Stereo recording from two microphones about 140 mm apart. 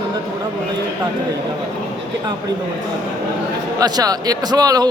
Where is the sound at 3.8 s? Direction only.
25° right (ahead or behind).